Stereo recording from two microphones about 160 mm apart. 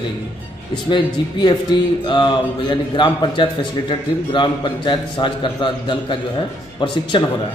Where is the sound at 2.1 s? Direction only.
30° left (ahead or behind).